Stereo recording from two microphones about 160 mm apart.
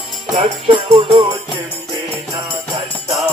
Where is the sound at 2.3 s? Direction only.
25° right (ahead or behind).